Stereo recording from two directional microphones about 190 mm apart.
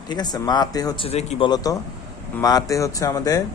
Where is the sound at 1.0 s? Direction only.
35° left (ahead or behind).